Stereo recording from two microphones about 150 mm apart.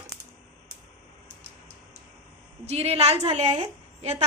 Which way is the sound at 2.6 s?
45° right (ahead or behind).